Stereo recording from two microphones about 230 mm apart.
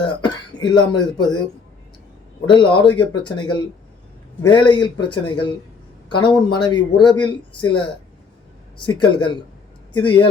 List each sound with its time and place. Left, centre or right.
0.0 s speech: centre
2.5 s speech: left
8.9 s speech: centre